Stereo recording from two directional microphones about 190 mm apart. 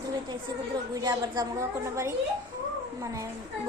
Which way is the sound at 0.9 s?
20° right (ahead or behind).